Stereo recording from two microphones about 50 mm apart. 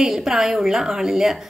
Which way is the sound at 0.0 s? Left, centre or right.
Centre.